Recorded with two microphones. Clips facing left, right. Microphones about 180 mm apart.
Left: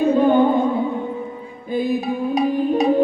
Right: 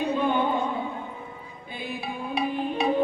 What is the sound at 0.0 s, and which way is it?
Music, 45° left (ahead or behind).